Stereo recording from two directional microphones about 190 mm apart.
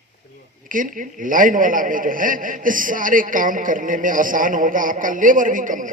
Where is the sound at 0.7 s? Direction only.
45° right (ahead or behind).